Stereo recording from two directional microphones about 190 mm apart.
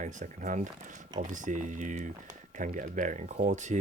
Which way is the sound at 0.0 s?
40° right (ahead or behind).